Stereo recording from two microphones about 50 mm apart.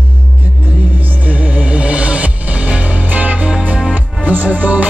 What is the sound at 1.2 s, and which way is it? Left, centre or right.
Music, right.